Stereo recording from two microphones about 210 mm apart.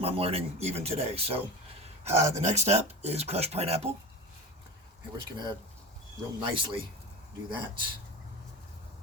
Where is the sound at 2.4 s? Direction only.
35° right (ahead or behind).